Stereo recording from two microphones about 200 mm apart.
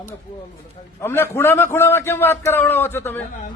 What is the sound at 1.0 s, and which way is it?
A man's voice, 10° left (ahead or behind).